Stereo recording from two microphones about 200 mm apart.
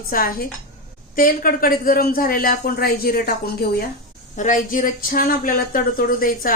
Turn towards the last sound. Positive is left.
turn(degrees=45)  # may be behind; listen again after turning